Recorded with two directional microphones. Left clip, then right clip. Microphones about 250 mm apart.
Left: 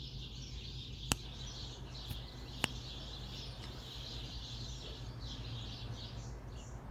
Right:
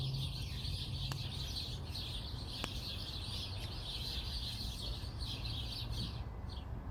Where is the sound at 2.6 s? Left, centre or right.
Centre.